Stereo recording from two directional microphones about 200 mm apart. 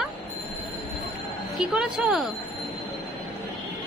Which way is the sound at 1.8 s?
5° right (ahead or behind).